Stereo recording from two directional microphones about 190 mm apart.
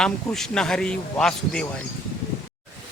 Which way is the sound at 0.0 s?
5° left (ahead or behind).